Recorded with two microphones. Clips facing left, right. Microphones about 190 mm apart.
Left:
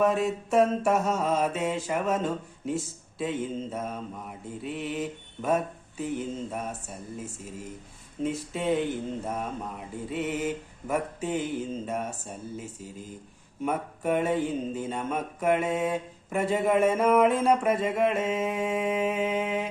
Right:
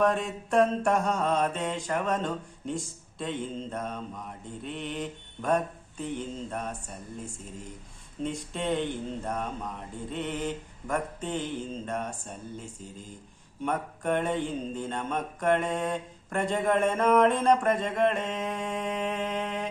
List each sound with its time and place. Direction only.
0.0 s mantra: 5° left (ahead or behind)